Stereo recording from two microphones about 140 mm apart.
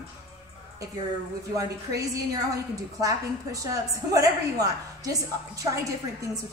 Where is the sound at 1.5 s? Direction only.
25° right (ahead or behind).